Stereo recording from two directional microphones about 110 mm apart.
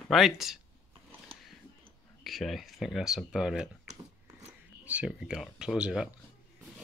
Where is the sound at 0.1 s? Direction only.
Centre (ahead or behind).